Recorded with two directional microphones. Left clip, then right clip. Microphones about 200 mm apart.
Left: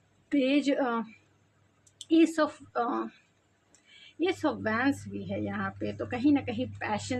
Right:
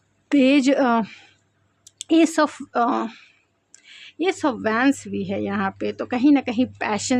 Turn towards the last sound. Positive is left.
turn(degrees=-60)  # may be behind; listen again after turning